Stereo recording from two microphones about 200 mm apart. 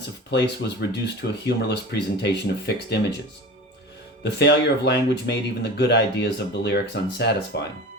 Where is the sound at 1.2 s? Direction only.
55° left (ahead or behind).